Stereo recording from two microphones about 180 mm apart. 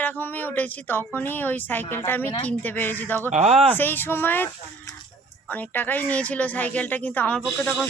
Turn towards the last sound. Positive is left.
turn(degrees=5)  # may be behind; listen again after turning